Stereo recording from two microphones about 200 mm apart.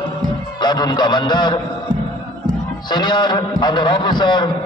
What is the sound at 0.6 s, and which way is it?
A man's voice, 20° left (ahead or behind).